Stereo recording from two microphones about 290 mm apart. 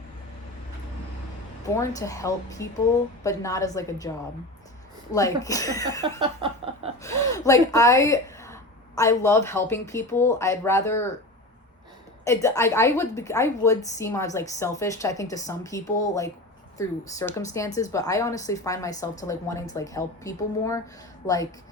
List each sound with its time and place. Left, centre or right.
1.7 s a woman's voice: centre
5.1 s a woman's voice: centre
6.0 s a sound: centre
7.0 s a woman's voice: centre
12.2 s a woman's voice: centre